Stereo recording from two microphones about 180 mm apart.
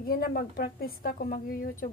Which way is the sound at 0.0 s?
55° left (ahead or behind).